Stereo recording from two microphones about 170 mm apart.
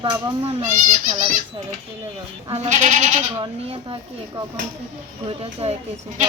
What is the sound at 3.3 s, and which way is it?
A woman's voice, 30° right (ahead or behind).